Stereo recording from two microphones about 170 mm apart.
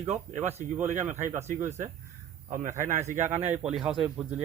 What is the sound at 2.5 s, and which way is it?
Speech, 50° right (ahead or behind).